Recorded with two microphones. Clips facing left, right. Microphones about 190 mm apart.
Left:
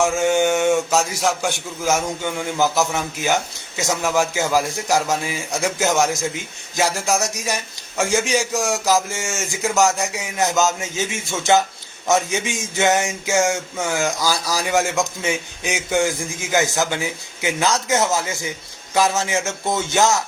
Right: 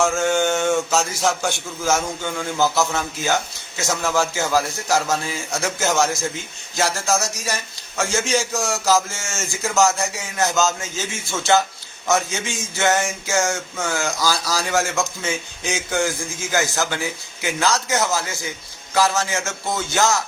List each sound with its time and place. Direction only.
0.0 s a man's voice: 15° left (ahead or behind)